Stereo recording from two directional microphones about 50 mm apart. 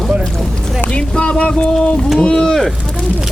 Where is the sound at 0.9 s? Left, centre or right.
Centre.